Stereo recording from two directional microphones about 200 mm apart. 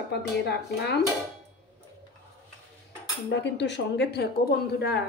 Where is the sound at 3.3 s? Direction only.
60° left (ahead or behind).